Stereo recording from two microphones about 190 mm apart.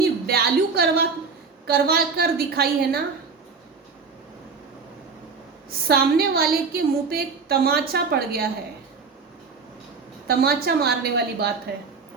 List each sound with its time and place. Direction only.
0.0 s a sound: 55° right (ahead or behind)
1.6 s a woman's voice: 55° right (ahead or behind)
5.9 s a woman's voice: 55° right (ahead or behind)
10.2 s a woman's voice: 55° right (ahead or behind)